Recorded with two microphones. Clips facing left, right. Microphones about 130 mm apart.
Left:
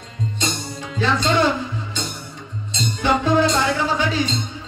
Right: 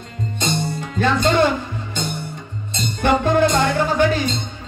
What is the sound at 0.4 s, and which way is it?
Music, 55° right (ahead or behind).